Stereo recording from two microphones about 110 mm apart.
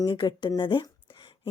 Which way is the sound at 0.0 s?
40° left (ahead or behind).